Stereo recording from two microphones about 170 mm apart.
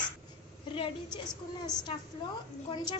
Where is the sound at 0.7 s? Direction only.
30° left (ahead or behind).